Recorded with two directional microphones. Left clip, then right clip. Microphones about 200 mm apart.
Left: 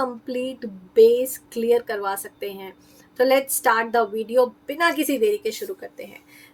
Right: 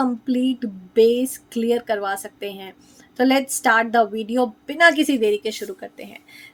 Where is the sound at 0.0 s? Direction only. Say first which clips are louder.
Right 3 dB; 35° right (ahead or behind).